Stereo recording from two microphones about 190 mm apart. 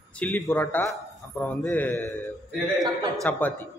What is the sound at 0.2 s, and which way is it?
A man's voice, 10° left (ahead or behind).